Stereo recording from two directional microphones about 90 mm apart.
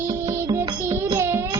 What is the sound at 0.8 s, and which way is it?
Music, 30° right (ahead or behind).